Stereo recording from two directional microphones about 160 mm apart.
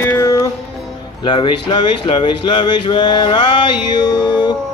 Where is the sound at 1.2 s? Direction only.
30° left (ahead or behind).